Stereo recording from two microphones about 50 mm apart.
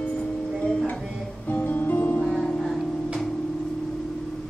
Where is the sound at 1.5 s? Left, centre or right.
Left.